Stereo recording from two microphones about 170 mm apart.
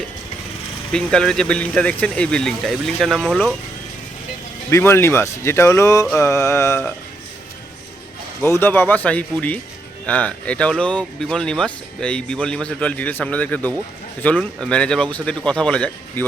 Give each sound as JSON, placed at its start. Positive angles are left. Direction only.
{"t": 0.9, "sound": "speech", "side_deg": 5}
{"t": 4.7, "sound": "speech", "side_deg": 15}
{"t": 8.4, "sound": "speech", "side_deg": 15}